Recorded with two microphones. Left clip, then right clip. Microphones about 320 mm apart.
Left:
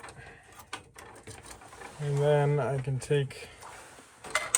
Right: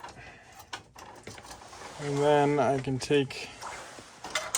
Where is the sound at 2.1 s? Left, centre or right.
Right.